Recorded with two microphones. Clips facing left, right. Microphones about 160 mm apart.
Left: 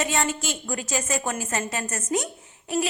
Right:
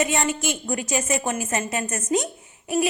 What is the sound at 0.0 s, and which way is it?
A woman's voice, 15° right (ahead or behind).